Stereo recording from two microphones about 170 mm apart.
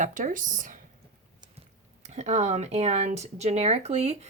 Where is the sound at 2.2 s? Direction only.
40° right (ahead or behind).